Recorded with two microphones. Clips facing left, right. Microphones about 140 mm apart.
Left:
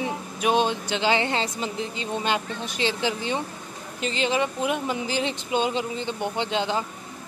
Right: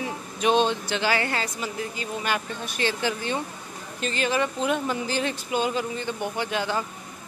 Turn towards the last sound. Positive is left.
turn(degrees=20)  # may be behind; listen again after turning